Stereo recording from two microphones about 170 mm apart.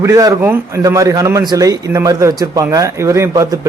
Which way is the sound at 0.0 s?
20° right (ahead or behind).